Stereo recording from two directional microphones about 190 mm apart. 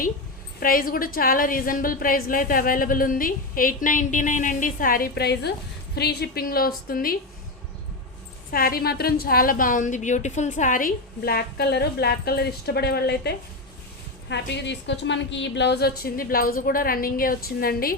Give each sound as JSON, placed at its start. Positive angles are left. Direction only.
{"t": 0.6, "sound": "a woman's voice", "side_deg": 50}
{"t": 8.4, "sound": "a woman's voice", "side_deg": 50}